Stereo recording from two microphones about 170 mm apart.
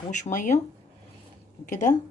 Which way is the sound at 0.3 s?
45° left (ahead or behind).